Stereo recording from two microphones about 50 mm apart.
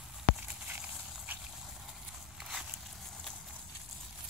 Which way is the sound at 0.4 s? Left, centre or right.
Right.